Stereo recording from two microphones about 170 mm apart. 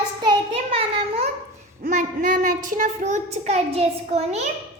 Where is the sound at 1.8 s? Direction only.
50° right (ahead or behind).